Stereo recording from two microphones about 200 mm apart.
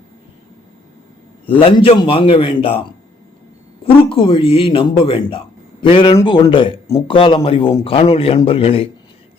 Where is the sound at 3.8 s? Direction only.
25° left (ahead or behind).